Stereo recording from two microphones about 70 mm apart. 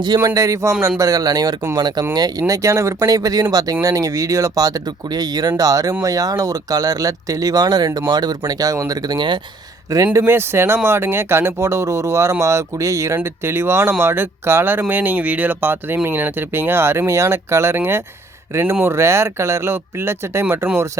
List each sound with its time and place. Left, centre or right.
0.3 s speech: right
0.8 s speech: right
1.0 s speech: right
1.7 s speech: right
2.5 s speech: right
8.4 s speech: right
8.9 s speech: right
10.2 s speech: right
13.2 s speech: right